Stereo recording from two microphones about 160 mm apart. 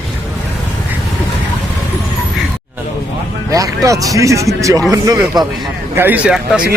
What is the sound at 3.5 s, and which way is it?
Speech, 20° right (ahead or behind).